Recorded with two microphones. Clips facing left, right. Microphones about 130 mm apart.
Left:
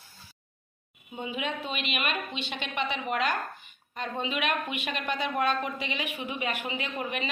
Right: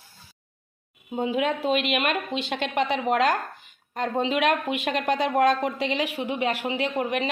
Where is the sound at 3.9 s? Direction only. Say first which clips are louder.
Right 8 dB; 75° right (ahead or behind).